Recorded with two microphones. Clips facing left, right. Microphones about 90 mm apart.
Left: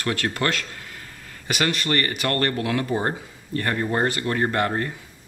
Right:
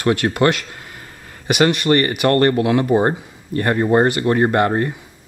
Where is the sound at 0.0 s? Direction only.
20° right (ahead or behind).